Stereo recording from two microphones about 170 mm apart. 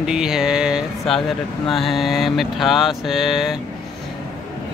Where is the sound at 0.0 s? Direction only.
5° right (ahead or behind).